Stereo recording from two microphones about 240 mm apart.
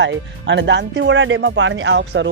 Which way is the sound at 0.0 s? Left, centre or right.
Right.